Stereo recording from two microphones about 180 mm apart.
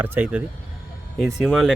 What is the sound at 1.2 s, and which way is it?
Speech, centre (ahead or behind).